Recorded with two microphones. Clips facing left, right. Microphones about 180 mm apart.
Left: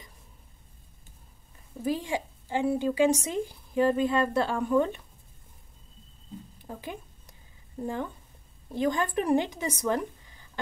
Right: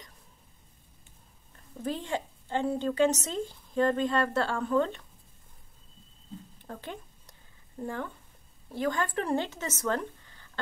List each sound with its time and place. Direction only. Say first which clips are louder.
1.5 s a woman's voice: left 4 dB; 10° left (ahead or behind)
6.6 s a sound: left 2 dB; 10° left (ahead or behind)
7.8 s a woman's voice: left 3 dB; 15° left (ahead or behind)